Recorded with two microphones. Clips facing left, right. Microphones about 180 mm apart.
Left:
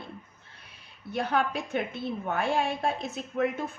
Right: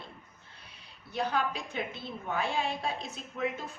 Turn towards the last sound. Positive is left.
turn(degrees=55)  # may be behind; listen again after turning